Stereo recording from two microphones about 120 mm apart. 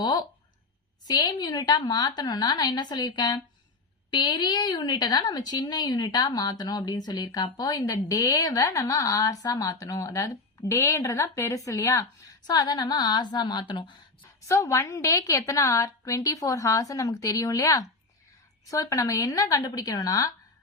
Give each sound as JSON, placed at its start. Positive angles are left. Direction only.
{"t": 0.0, "sound": "a sound", "side_deg": 35}
{"t": 1.0, "sound": "speech", "side_deg": 35}
{"t": 14.4, "sound": "a woman's voice", "side_deg": 25}